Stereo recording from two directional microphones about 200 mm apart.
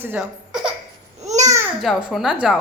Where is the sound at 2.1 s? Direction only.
5° right (ahead or behind).